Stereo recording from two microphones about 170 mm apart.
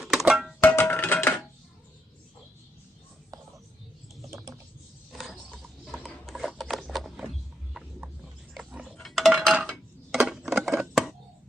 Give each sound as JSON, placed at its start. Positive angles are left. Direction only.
{"t": 0.0, "sound": "music", "side_deg": 0}
{"t": 0.6, "sound": "tabla", "side_deg": 10}
{"t": 4.3, "sound": "typing", "side_deg": -15}
{"t": 5.1, "sound": "a sound", "side_deg": 0}
{"t": 8.5, "sound": "tick-tock", "side_deg": -5}
{"t": 9.0, "sound": "dishes", "side_deg": 0}